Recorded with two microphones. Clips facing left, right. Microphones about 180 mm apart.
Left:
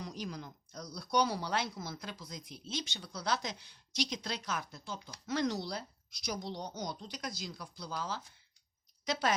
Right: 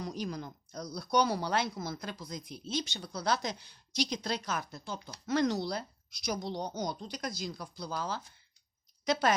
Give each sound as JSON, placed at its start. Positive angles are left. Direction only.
{"t": 0.0, "sound": "speech", "side_deg": -45}